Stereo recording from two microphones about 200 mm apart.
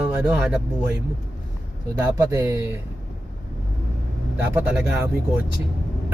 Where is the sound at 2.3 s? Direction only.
15° right (ahead or behind).